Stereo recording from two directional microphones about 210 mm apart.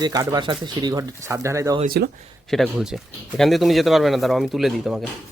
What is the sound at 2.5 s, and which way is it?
Speech, centre (ahead or behind).